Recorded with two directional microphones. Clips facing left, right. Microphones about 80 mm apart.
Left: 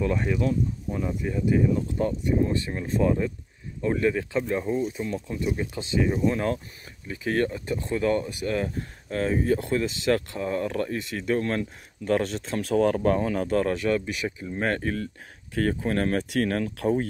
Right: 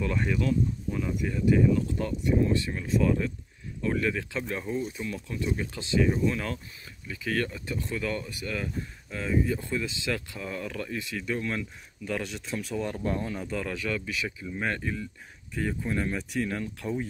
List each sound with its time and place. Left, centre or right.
0.0 s speech: centre
0.4 s speech: left
10.4 s speech: left
12.5 s speech: left
13.5 s speech: left
15.5 s speech: left
16.3 s speech: left